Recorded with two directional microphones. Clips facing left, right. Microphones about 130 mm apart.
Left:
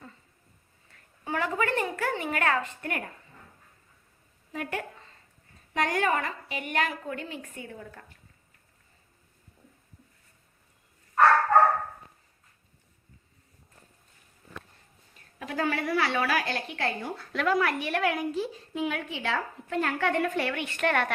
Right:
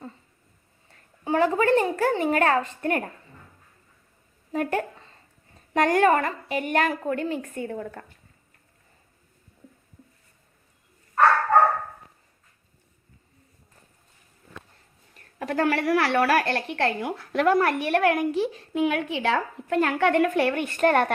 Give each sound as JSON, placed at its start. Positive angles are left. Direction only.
{"t": 1.2, "sound": "a woman's voice", "side_deg": -30}
{"t": 4.5, "sound": "a woman's voice", "side_deg": -40}
{"t": 15.1, "sound": "a woman's voice", "side_deg": -60}
{"t": 20.5, "sound": "a woman's voice", "side_deg": -45}